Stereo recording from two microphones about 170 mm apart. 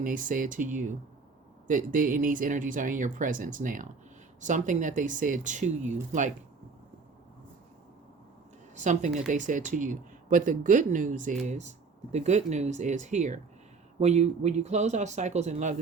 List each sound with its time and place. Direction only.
0.0 s speech: 50° right (ahead or behind)
8.8 s speech: 45° right (ahead or behind)